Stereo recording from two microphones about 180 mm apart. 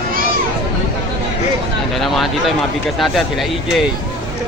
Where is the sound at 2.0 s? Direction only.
Centre (ahead or behind).